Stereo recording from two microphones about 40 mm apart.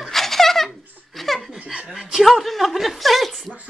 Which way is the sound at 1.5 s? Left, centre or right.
Centre.